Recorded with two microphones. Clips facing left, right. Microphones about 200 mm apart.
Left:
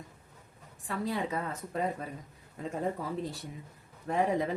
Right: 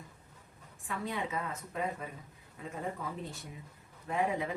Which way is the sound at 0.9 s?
35° left (ahead or behind).